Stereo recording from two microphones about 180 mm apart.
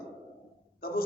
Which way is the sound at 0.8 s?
55° left (ahead or behind).